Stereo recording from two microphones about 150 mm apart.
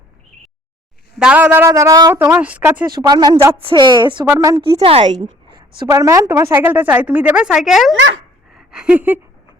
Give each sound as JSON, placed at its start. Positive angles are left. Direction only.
{"t": 1.2, "sound": "a woman's voice", "side_deg": -10}
{"t": 2.1, "sound": "a woman's voice", "side_deg": -10}
{"t": 2.9, "sound": "a woman's voice", "side_deg": -25}
{"t": 5.5, "sound": "a woman's voice", "side_deg": -25}
{"t": 8.5, "sound": "a sound", "side_deg": -5}